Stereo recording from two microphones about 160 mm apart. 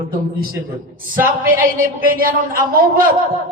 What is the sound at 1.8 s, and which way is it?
A man's voice, 60° right (ahead or behind).